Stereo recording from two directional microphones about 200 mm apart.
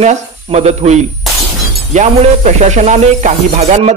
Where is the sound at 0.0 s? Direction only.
35° right (ahead or behind).